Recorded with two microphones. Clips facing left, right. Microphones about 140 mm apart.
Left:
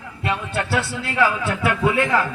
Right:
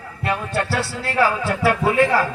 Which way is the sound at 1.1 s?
35° right (ahead or behind).